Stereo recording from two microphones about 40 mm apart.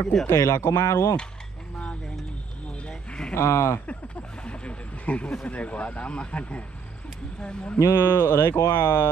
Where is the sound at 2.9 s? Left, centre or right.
Left.